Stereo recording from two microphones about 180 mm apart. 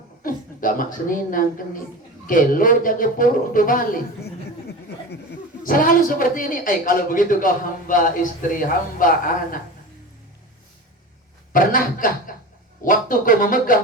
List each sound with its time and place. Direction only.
0.2 s a woman's voice: 50° left (ahead or behind)
5.6 s a man's voice: 50° left (ahead or behind)
11.5 s a man's voice: 50° left (ahead or behind)